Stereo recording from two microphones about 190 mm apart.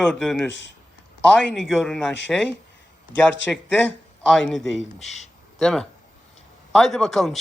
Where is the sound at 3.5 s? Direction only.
5° left (ahead or behind).